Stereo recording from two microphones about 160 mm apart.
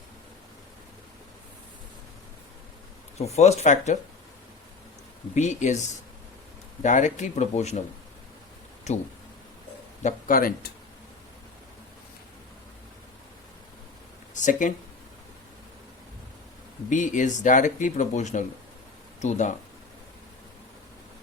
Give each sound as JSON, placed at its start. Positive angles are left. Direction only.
{"t": 3.2, "sound": "speech", "side_deg": 40}
{"t": 5.3, "sound": "speech", "side_deg": 45}
{"t": 6.8, "sound": "speech", "side_deg": 50}
{"t": 10.0, "sound": "a man's voice", "side_deg": 55}
{"t": 14.3, "sound": "speech", "side_deg": 50}
{"t": 16.9, "sound": "speech", "side_deg": 50}